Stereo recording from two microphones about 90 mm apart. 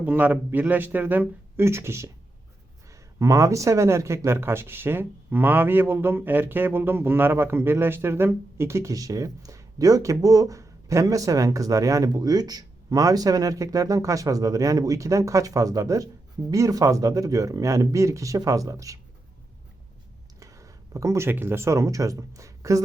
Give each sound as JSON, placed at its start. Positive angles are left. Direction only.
{"t": 0.0, "sound": "speech", "side_deg": -20}
{"t": 20.4, "sound": "a sound", "side_deg": -40}
{"t": 21.2, "sound": "speech", "side_deg": -25}